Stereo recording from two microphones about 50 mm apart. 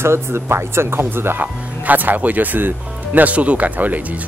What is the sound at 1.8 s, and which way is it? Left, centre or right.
Speech, right.